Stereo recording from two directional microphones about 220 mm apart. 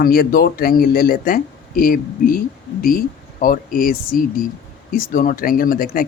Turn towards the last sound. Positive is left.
turn(degrees=40)  # may be behind; listen again after turning